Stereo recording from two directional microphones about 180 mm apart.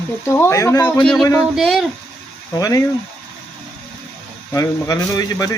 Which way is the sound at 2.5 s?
20° left (ahead or behind).